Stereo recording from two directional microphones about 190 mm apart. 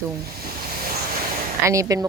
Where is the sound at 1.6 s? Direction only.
15° right (ahead or behind).